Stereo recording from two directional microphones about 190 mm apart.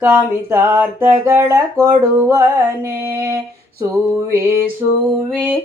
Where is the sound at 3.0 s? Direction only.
15° right (ahead or behind).